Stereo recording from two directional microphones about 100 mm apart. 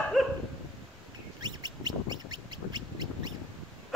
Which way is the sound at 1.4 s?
45° right (ahead or behind).